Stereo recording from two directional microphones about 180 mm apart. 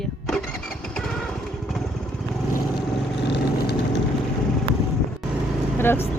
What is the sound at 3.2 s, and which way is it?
Vehicle, 75° left (ahead or behind).